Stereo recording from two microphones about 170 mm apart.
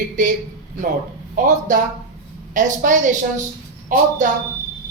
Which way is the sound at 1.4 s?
50° right (ahead or behind).